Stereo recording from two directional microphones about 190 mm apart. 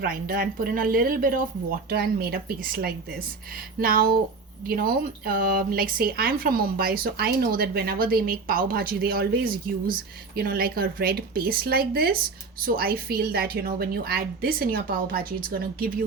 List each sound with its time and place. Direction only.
0.0 s speech: 50° right (ahead or behind)